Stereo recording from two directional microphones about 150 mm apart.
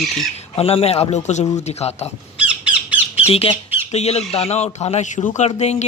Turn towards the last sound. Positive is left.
turn(degrees=45)  # may be behind; listen again after turning